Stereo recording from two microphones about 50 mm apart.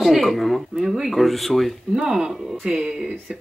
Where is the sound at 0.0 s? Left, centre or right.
Centre.